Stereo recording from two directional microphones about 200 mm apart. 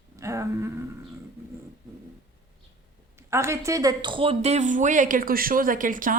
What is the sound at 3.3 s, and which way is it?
Speech, 15° right (ahead or behind).